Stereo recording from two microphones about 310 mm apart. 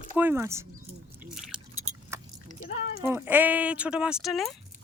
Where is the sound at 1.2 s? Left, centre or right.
Centre.